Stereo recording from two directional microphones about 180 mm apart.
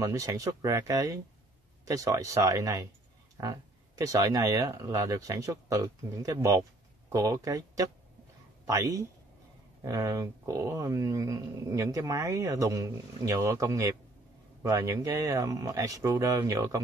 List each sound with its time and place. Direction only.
0.0 s speech: 20° right (ahead or behind)